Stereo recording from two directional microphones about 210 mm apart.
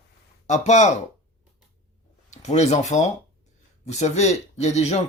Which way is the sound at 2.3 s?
35° left (ahead or behind).